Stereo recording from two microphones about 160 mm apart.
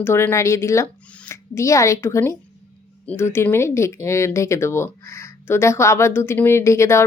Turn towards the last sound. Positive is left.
turn(degrees=15)  # may be behind; listen again after turning